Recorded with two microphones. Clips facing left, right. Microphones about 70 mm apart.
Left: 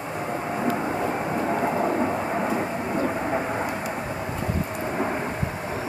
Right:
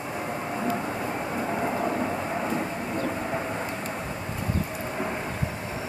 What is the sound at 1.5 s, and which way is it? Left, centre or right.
Vehicle, centre.